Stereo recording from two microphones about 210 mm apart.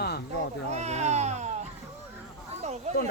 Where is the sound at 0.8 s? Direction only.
30° right (ahead or behind).